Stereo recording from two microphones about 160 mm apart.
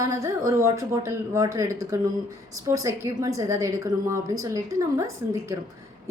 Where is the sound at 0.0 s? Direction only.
20° right (ahead or behind).